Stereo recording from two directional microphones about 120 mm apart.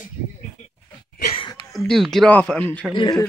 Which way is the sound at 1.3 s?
45° left (ahead or behind).